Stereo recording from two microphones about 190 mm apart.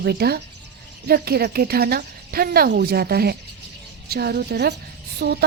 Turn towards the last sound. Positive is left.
turn(degrees=-60)  # may be behind; listen again after turning